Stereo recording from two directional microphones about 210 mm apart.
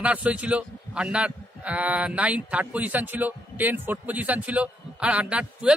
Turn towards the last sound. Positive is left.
turn(degrees=-5)  # may be behind; listen again after turning